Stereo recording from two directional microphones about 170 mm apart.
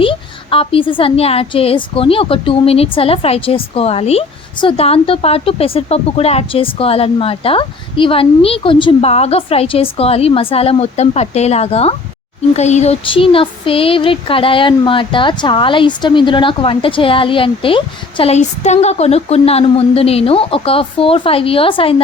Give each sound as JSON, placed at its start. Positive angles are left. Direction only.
{"t": 0.0, "sound": "a woman's voice", "side_deg": 30}